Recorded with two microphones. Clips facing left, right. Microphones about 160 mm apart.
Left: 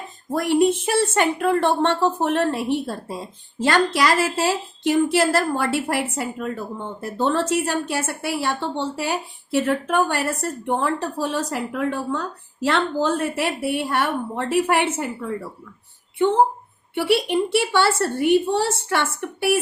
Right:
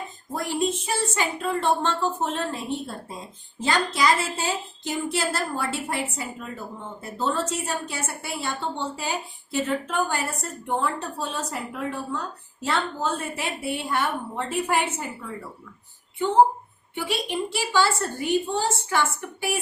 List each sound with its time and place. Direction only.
0.3 s a woman's voice: 70° left (ahead or behind)
3.6 s a woman's voice: 70° left (ahead or behind)
16.9 s a woman's voice: 70° left (ahead or behind)